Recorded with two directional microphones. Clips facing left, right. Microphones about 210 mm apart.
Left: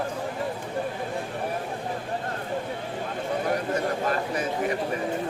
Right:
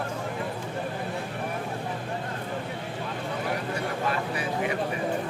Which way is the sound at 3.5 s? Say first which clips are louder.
Left 4 dB; 45° left (ahead or behind).